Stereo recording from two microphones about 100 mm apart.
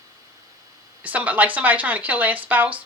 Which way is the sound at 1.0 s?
15° right (ahead or behind).